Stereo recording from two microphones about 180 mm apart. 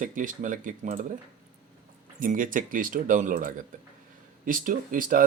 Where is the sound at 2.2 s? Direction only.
45° right (ahead or behind).